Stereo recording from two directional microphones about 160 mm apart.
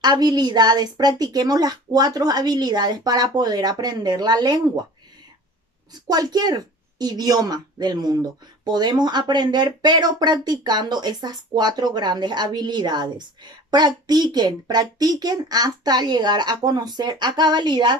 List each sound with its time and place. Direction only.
0.0 s a woman's voice: 25° right (ahead or behind)
6.0 s a woman's voice: 25° right (ahead or behind)